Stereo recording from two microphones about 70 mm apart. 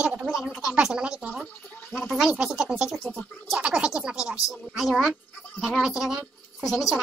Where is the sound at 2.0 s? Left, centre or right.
Centre.